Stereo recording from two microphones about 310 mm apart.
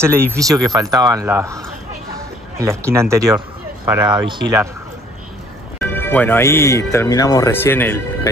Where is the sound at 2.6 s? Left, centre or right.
Centre.